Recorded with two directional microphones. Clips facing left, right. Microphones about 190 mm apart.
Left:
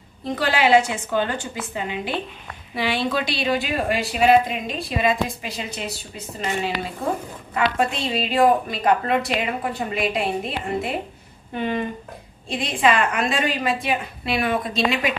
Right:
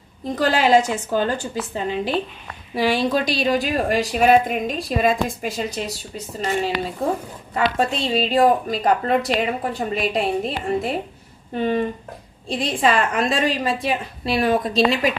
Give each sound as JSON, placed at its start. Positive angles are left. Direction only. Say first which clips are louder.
{"t": 0.4, "sound": "a woman's voice", "louder": "right 1 dB", "side_deg": -40}